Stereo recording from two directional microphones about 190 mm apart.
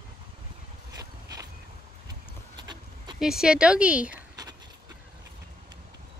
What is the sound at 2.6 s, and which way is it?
Sheep, 25° right (ahead or behind).